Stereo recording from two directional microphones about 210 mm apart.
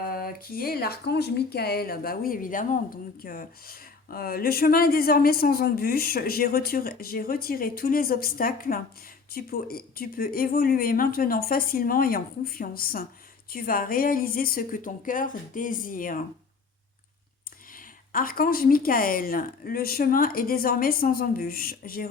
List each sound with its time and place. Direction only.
0.1 s a woman's voice: 45° left (ahead or behind)
17.7 s speech: 40° left (ahead or behind)